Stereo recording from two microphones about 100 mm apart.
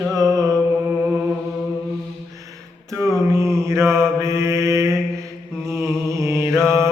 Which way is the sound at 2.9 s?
35° left (ahead or behind).